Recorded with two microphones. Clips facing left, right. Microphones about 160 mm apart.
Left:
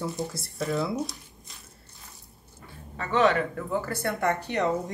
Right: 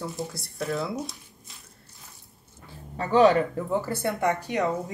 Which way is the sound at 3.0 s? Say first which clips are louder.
Right 4 dB; 35° right (ahead or behind).